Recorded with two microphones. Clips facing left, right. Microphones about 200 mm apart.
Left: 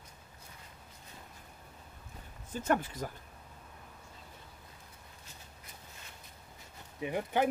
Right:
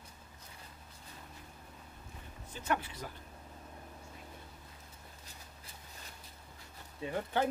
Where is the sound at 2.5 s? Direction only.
45° left (ahead or behind).